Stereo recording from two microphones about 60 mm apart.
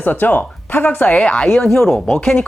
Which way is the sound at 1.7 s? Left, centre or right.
Centre.